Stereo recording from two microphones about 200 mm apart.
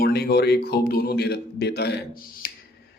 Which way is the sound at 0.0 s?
50° left (ahead or behind).